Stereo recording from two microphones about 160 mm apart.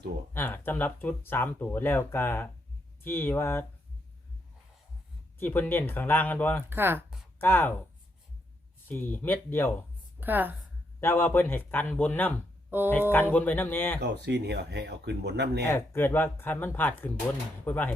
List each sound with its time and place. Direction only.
0.3 s speech: 10° left (ahead or behind)
5.4 s speech: 10° left (ahead or behind)
6.7 s a woman's voice: 15° right (ahead or behind)
7.3 s speech: 15° left (ahead or behind)
8.9 s speech: 15° left (ahead or behind)
10.2 s a woman's voice: 10° right (ahead or behind)
11.0 s speech: 15° left (ahead or behind)
12.7 s a woman's voice: 15° right (ahead or behind)
13.3 s speech: 10° left (ahead or behind)
14.0 s speech: 90° right
15.6 s speech: 15° left (ahead or behind)